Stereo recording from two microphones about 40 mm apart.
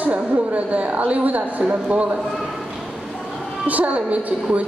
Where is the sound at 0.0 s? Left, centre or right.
Right.